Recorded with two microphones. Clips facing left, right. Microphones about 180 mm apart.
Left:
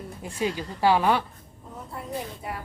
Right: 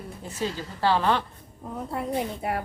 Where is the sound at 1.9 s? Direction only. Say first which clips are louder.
Right 5 dB; 65° right (ahead or behind).